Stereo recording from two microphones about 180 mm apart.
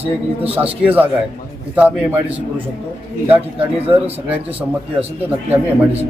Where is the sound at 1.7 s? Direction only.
10° right (ahead or behind).